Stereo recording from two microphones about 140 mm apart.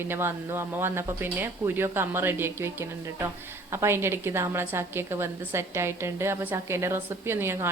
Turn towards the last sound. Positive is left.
turn(degrees=-15)  # may be behind; listen again after turning